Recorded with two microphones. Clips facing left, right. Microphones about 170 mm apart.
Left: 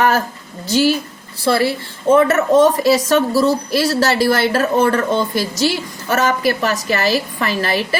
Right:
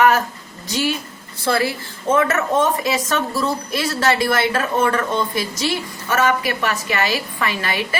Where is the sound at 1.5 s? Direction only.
30° left (ahead or behind).